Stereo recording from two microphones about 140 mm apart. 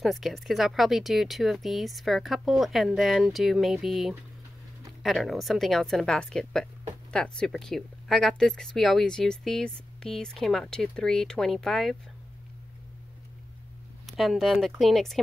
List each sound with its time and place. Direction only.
0.0 s speech: centre (ahead or behind)
14.0 s speech: centre (ahead or behind)